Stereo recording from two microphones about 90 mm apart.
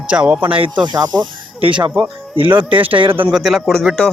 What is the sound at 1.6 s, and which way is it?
Speech, 65° right (ahead or behind).